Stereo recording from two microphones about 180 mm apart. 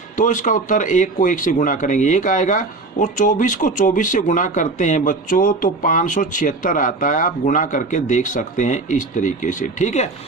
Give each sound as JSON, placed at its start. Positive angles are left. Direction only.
{"t": 0.2, "sound": "speech", "side_deg": 45}